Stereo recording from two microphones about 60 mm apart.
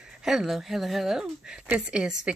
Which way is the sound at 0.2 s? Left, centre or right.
Centre.